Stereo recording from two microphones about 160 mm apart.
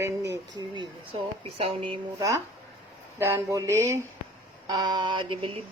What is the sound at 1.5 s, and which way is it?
Speech, 35° right (ahead or behind).